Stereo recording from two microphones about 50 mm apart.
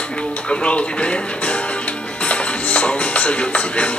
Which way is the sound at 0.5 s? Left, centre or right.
Left.